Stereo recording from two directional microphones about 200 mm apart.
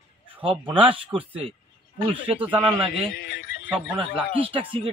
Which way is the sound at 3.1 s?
50° left (ahead or behind).